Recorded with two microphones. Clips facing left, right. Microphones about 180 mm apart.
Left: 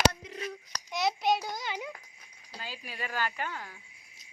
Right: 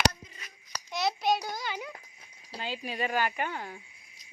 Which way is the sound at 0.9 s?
20° left (ahead or behind).